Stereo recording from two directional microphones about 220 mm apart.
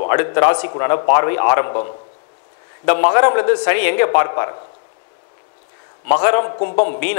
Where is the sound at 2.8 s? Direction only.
20° left (ahead or behind).